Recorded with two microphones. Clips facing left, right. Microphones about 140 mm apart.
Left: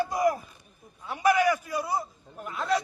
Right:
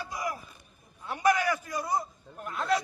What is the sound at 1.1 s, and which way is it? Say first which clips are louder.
A man's voice: left 3 dB; 10° left (ahead or behind).